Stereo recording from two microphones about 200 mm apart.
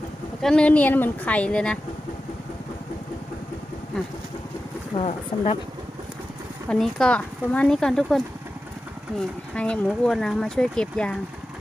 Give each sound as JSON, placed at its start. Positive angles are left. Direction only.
{"t": 0.4, "sound": "a woman's voice", "side_deg": 5}
{"t": 4.9, "sound": "speech", "side_deg": 30}
{"t": 6.7, "sound": "speech", "side_deg": 5}